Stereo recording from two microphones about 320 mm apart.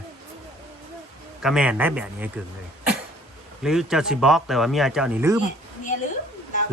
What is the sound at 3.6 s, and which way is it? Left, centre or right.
A man's voice, centre.